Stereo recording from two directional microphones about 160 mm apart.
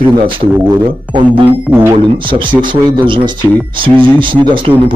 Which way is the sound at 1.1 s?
35° right (ahead or behind).